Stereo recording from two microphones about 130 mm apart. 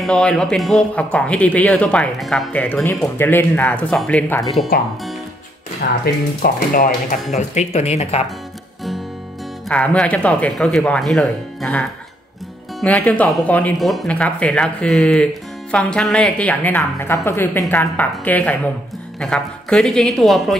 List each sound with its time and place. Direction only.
0.0 s a woman's voice: 5° left (ahead or behind)
2.5 s a woman's voice: 10° left (ahead or behind)
6.4 s speech: 90° left; by 8.2 s 55° left (ahead or behind)
9.7 s a woman's voice: 10° left (ahead or behind)
12.8 s a woman's voice: 10° left (ahead or behind)
13.7 s a woman's voice: centre (ahead or behind)